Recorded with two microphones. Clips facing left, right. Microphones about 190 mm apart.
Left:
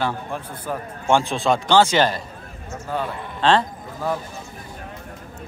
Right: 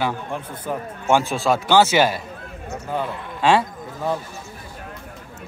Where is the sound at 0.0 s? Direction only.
15° right (ahead or behind).